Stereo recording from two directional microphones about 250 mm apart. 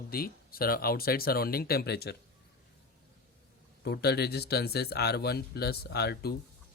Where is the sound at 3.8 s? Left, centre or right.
Left.